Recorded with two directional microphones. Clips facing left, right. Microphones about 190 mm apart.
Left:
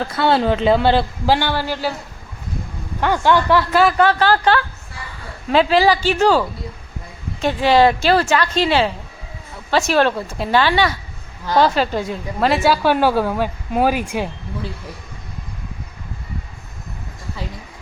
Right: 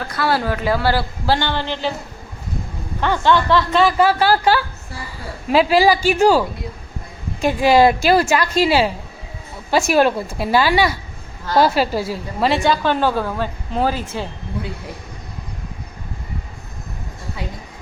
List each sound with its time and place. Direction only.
0.1 s a woman's voice: 25° left (ahead or behind)
1.4 s a woman's voice: 10° left (ahead or behind)
3.0 s a woman's voice: 10° left (ahead or behind); by 6.4 s 10° right (ahead or behind)
7.4 s a woman's voice: 10° right (ahead or behind); by 14.3 s 15° left (ahead or behind)